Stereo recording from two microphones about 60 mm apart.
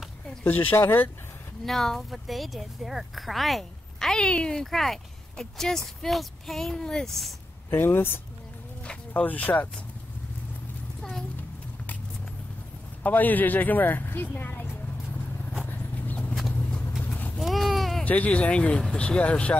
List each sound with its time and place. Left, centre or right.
0.4 s a woman's voice: left
0.7 s speech: left
1.7 s speech: centre
7.7 s speech: left
9.1 s a woman's voice: left
13.0 s a woman's voice: left
15.6 s horse: left
17.4 s goat: centre
18.0 s a woman's voice: left